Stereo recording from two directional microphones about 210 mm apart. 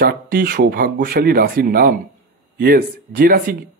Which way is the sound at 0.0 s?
45° right (ahead or behind).